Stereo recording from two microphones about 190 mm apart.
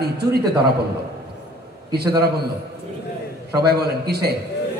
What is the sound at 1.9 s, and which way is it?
Speech, 55° right (ahead or behind).